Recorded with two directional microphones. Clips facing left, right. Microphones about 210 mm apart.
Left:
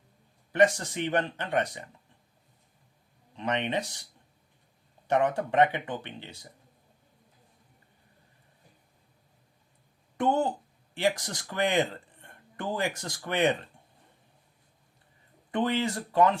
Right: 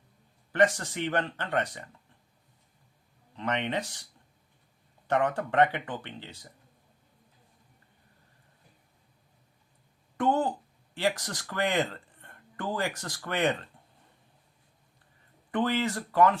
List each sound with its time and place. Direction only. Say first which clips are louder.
0.5 s speech: left 2 dB; 15° left (ahead or behind)
3.3 s speech: left 1 dB; 15° left (ahead or behind)
5.0 s speech: left 1 dB; 15° left (ahead or behind)
10.2 s speech: even; 15° left (ahead or behind)
15.5 s speech: even; 15° left (ahead or behind)